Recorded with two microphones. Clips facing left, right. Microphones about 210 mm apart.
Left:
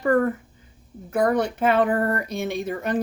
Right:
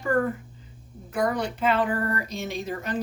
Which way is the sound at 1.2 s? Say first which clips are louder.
Left 4 dB; 55° left (ahead or behind).